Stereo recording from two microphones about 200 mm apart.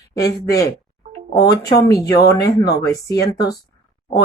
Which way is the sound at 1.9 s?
15° left (ahead or behind).